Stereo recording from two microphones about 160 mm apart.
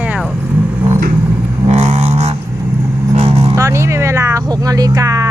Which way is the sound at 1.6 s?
40° right (ahead or behind).